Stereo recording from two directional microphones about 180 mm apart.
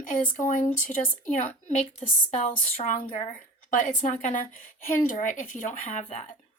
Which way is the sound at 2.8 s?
40° left (ahead or behind).